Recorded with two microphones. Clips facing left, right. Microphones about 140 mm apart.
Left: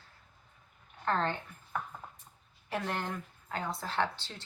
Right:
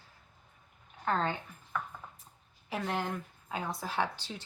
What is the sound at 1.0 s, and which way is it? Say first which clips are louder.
Speech: even; 10° right (ahead or behind).